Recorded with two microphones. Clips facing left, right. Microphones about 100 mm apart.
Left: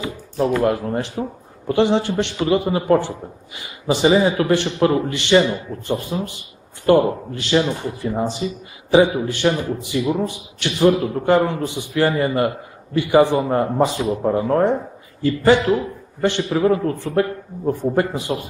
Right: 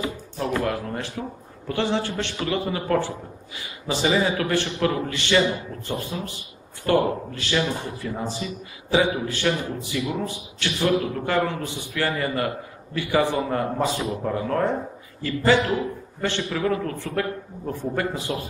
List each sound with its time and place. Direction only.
0.7 s a man's voice: 20° left (ahead or behind)
1.7 s a man's voice: 20° left (ahead or behind)